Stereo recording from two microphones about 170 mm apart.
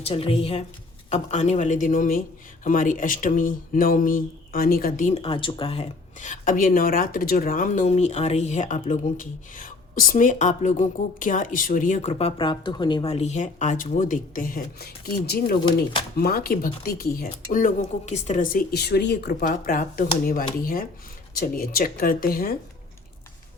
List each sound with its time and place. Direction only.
0.0 s a woman's voice: 35° left (ahead or behind)
12.4 s speech: 25° left (ahead or behind); by 22.5 s 60° left (ahead or behind)